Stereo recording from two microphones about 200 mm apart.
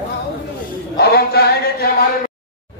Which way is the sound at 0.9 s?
55° left (ahead or behind).